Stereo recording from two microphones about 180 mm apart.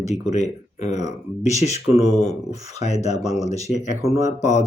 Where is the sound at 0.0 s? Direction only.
40° left (ahead or behind).